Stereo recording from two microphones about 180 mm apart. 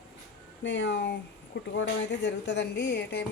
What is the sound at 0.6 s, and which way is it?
Speech, 80° left.